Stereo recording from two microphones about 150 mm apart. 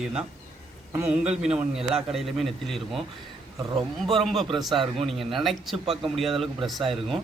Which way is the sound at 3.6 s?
25° right (ahead or behind).